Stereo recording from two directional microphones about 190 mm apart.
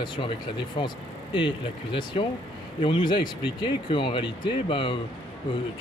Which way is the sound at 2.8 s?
25° left (ahead or behind).